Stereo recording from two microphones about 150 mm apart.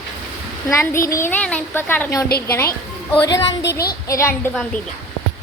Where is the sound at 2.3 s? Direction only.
90° left.